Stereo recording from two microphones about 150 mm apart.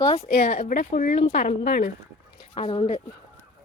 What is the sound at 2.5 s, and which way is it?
Speech, 40° left (ahead or behind).